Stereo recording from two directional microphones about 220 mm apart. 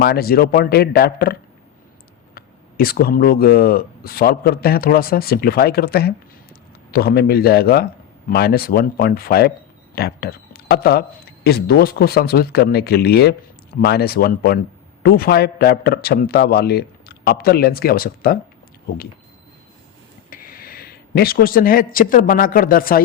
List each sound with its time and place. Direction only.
0.0 s a man's voice: 45° left (ahead or behind)
20.3 s speech: 40° left (ahead or behind)